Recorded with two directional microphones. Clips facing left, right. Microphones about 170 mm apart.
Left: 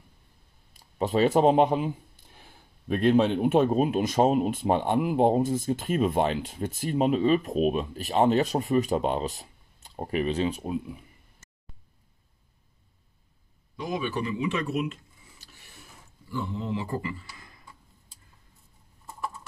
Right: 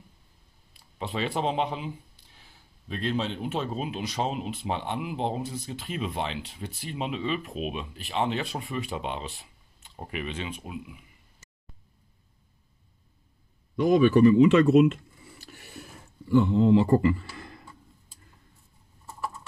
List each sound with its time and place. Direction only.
0.7 s speech: 45° left (ahead or behind)
13.7 s speech: 65° right (ahead or behind)
15.4 s mechanisms: 70° right (ahead or behind)
16.3 s speech: 70° right (ahead or behind)